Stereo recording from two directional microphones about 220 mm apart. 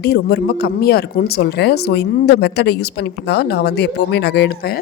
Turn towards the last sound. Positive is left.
turn(degrees=45)  # may be behind; listen again after turning